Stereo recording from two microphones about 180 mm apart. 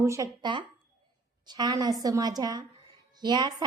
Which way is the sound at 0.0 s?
20° right (ahead or behind).